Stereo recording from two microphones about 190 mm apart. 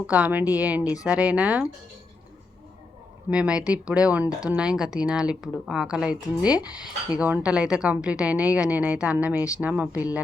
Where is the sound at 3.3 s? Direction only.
5° right (ahead or behind).